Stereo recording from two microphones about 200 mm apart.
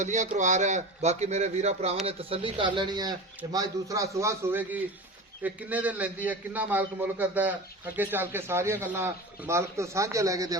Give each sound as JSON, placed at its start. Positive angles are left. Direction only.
{"t": 0.0, "sound": "a man's voice", "side_deg": -35}